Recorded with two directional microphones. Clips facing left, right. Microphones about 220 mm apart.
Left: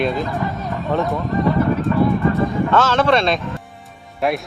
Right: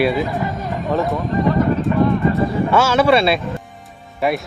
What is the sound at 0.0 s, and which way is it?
Speech, 10° right (ahead or behind).